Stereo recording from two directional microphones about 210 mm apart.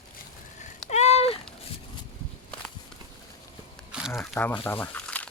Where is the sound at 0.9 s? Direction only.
30° left (ahead or behind).